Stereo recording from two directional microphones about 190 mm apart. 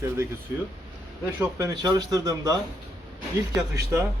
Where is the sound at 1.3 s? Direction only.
15° right (ahead or behind).